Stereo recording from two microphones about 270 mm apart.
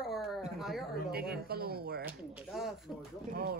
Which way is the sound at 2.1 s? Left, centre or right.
Centre.